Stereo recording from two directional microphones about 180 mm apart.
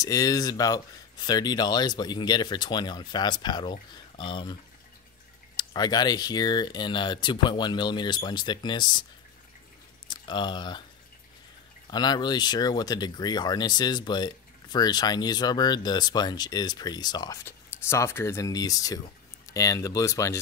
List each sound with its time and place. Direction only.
0.0 s speech: 20° left (ahead or behind)
5.6 s speech: 25° left (ahead or behind)
10.0 s speech: 25° left (ahead or behind)
11.9 s speech: 25° left (ahead or behind)